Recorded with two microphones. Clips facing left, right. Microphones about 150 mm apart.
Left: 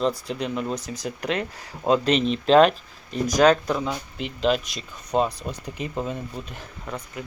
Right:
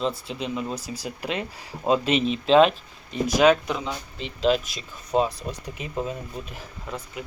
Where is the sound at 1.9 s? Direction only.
5° right (ahead or behind).